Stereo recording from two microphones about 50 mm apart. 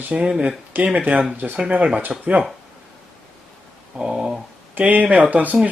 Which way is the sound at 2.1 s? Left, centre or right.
Centre.